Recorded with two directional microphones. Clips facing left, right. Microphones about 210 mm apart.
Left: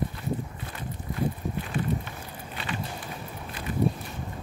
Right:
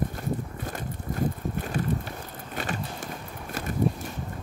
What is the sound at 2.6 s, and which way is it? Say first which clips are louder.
Vehicle: right 2 dB; 45° right (ahead or behind).